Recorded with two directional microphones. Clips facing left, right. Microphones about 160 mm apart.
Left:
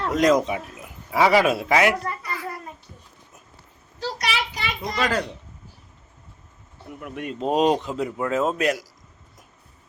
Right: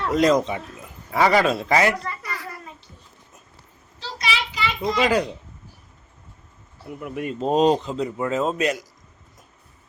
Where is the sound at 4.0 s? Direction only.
55° left (ahead or behind).